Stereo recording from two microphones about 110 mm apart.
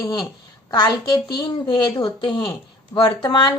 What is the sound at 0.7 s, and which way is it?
Speech, 40° left (ahead or behind).